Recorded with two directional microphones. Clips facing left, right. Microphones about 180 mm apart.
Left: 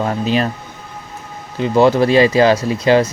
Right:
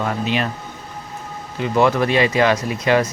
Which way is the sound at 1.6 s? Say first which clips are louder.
Left 5 dB; 30° left (ahead or behind).